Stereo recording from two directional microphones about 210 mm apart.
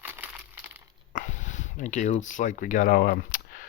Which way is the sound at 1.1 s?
35° left (ahead or behind).